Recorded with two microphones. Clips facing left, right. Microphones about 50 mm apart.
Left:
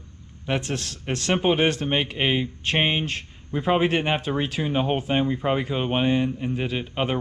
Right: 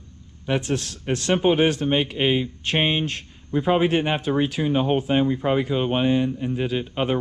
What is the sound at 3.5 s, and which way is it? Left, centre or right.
Speech, left.